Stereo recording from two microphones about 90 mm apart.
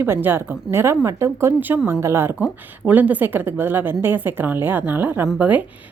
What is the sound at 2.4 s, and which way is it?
A woman's voice, 15° right (ahead or behind).